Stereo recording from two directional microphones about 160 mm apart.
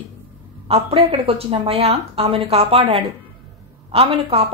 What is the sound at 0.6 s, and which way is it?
Speech, 40° right (ahead or behind).